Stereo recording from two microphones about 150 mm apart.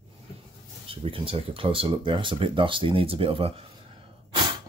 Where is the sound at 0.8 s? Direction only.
40° right (ahead or behind).